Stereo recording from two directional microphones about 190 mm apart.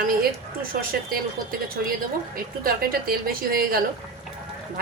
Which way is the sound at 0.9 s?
50° right (ahead or behind).